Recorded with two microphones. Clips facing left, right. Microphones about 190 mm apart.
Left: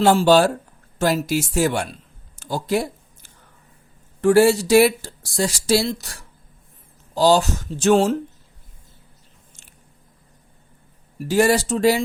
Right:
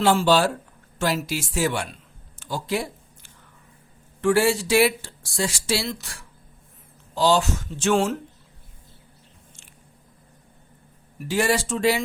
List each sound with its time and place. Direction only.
0.0 s a woman's voice: 45° left (ahead or behind)
2.4 s a sound: 45° left (ahead or behind)
4.2 s speech: 40° left (ahead or behind)
11.2 s speech: 40° left (ahead or behind)